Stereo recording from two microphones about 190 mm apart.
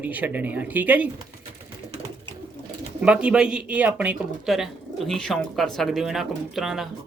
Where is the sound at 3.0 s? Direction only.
5° right (ahead or behind).